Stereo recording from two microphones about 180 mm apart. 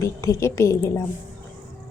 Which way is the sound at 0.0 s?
15° left (ahead or behind).